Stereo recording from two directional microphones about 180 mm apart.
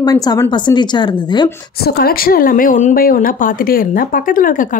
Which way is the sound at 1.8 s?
60° left (ahead or behind).